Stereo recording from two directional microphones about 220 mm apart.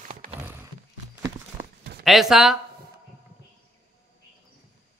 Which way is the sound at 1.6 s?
45° right (ahead or behind).